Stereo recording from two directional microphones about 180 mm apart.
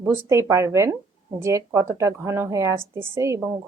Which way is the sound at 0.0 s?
10° right (ahead or behind).